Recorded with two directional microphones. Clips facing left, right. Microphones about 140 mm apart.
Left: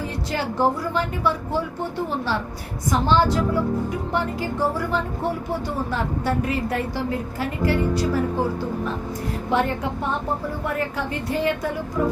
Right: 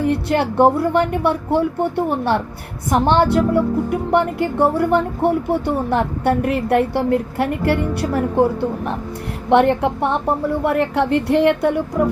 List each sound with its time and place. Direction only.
0.0 s a woman's voice: 65° right (ahead or behind)